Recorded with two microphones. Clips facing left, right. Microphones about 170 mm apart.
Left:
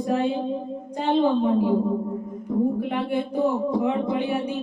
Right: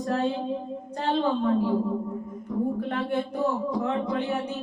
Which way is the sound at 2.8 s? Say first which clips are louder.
Left 2 dB; 10° left (ahead or behind).